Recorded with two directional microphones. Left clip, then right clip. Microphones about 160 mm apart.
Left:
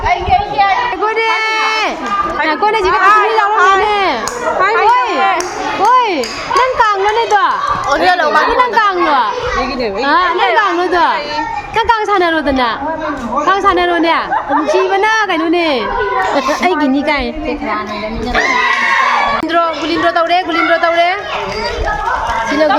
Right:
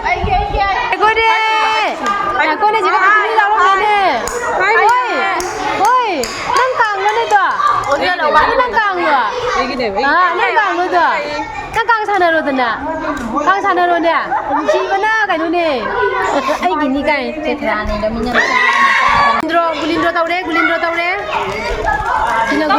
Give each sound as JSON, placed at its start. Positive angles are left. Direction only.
{"t": 1.0, "sound": "run", "side_deg": 10}
{"t": 2.5, "sound": "chatter", "side_deg": 20}
{"t": 3.0, "sound": "a sound", "side_deg": 45}
{"t": 3.8, "sound": "a sound", "side_deg": 15}
{"t": 7.9, "sound": "chatter", "side_deg": 65}
{"t": 8.4, "sound": "children playing", "side_deg": 20}
{"t": 10.6, "sound": "a sound", "side_deg": 20}
{"t": 11.8, "sound": "a child's voice", "side_deg": 20}
{"t": 19.5, "sound": "speech", "side_deg": 5}